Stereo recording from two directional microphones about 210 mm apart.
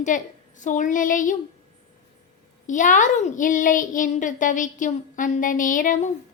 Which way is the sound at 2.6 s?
35° left (ahead or behind).